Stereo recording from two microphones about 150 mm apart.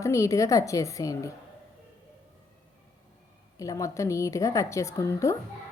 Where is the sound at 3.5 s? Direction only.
20° left (ahead or behind).